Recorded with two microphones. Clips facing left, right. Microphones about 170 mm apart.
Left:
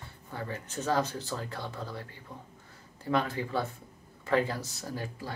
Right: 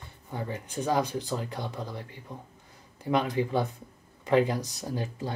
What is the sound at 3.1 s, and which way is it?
Speech, 15° right (ahead or behind).